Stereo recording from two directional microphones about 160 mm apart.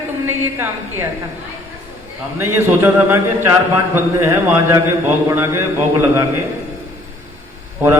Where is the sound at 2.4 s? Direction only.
15° right (ahead or behind).